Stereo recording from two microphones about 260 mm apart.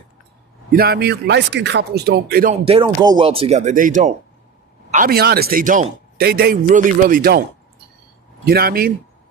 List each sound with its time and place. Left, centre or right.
0.7 s speech: right
8.4 s speech: right